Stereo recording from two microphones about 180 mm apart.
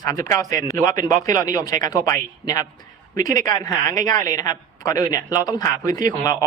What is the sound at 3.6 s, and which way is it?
Speech, 20° left (ahead or behind).